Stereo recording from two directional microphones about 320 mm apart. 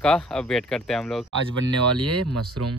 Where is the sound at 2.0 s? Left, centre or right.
Right.